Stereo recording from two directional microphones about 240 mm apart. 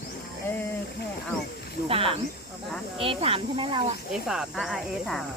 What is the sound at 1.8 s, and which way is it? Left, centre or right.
Speech, right.